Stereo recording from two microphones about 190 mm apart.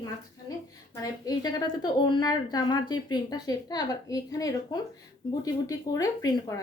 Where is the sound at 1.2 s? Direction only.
20° left (ahead or behind).